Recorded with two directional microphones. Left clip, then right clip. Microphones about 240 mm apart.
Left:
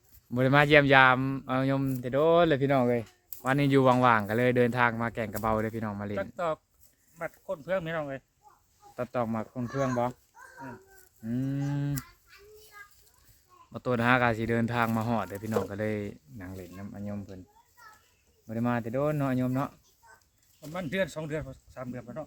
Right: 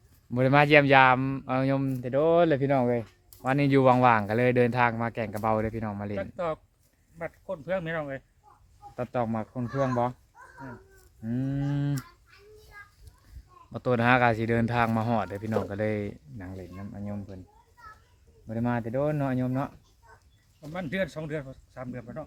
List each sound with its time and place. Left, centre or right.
0.3 s speech: centre
6.1 s speech: left
9.1 s speech: centre
11.2 s speech: centre
13.7 s speech: centre
18.4 s speech: centre
20.0 s chicken: left
20.7 s speech: left